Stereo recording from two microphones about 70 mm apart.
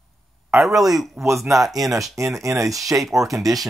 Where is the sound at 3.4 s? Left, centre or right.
Right.